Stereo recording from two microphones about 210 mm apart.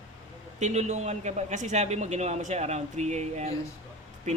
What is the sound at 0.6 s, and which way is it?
Speech, 35° right (ahead or behind).